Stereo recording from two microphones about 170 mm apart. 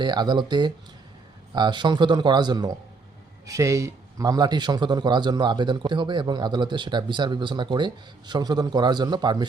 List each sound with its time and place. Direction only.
0.0 s a man's voice: 25° right (ahead or behind)